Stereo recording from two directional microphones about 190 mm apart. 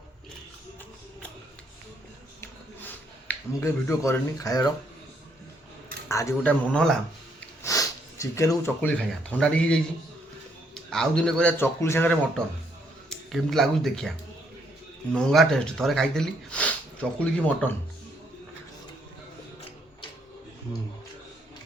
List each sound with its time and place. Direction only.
2.4 s a sound: 10° left (ahead or behind)
6.1 s a man's voice: 15° left (ahead or behind)
7.6 s speech: 15° left (ahead or behind)
10.8 s a man's voice: 5° left (ahead or behind)
13.1 s speech: centre (ahead or behind)
15.1 s speech: centre (ahead or behind)